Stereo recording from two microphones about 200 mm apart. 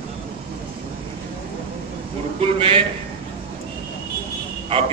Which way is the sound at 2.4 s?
25° right (ahead or behind).